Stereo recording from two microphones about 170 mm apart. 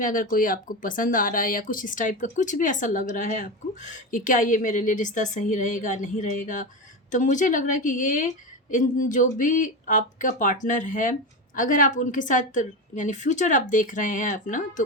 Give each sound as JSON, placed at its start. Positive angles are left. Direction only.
{"t": 0.0, "sound": "speech", "side_deg": 50}